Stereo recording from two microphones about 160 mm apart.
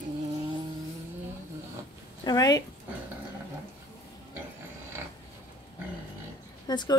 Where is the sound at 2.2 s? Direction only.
25° left (ahead or behind).